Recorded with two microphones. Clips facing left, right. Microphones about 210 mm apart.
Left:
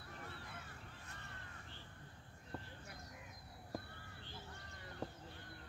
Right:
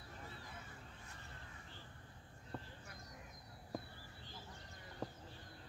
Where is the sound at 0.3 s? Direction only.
65° left (ahead or behind).